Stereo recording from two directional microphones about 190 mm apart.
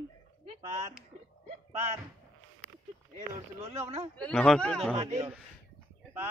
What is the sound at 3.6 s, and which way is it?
Speech, 35° right (ahead or behind).